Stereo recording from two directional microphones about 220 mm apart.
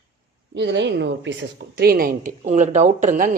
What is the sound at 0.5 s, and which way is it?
A woman's voice, 50° right (ahead or behind).